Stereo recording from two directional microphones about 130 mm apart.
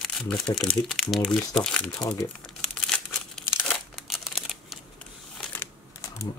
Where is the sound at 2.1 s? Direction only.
5° left (ahead or behind).